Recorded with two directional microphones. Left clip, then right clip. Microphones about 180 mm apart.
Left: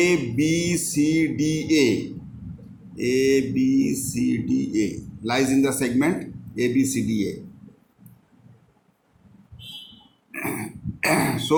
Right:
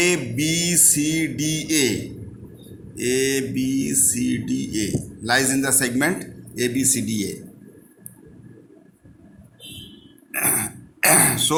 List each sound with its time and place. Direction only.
0.0 s mantra: 35° right (ahead or behind)
3.0 s mantra: 30° right (ahead or behind)
10.3 s throat clearing: 40° right (ahead or behind)